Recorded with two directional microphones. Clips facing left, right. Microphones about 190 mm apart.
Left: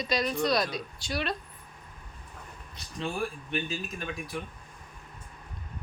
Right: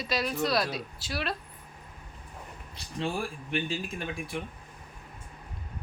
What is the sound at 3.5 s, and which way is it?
Speech, 30° right (ahead or behind).